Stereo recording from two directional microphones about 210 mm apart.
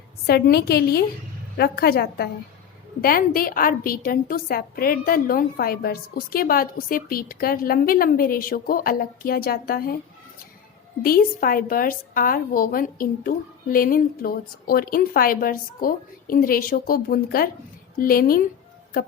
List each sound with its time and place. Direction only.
0.3 s a woman's voice: 50° left (ahead or behind)
11.0 s a woman's voice: 45° left (ahead or behind)